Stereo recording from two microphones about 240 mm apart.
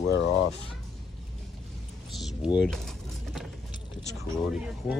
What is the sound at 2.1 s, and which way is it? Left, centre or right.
Speech, centre.